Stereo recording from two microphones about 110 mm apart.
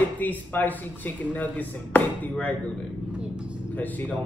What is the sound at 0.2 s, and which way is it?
Speech, 15° left (ahead or behind).